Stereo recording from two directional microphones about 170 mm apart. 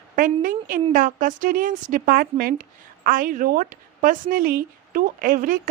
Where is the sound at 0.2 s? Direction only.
55° right (ahead or behind).